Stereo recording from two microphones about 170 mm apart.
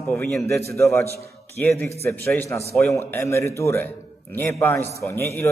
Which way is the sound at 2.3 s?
15° left (ahead or behind).